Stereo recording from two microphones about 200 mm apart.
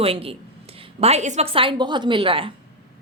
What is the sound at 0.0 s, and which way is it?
A woman's voice, 30° right (ahead or behind).